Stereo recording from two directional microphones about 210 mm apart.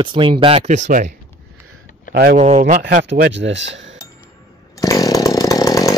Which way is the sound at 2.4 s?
35° right (ahead or behind).